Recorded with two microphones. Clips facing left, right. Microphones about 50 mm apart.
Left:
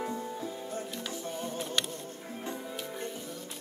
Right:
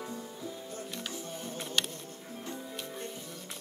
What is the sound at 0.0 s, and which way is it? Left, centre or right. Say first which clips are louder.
Music: left 5 dB; left.